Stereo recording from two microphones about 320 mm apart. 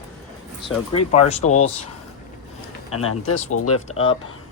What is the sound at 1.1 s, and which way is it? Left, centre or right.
Speech, left.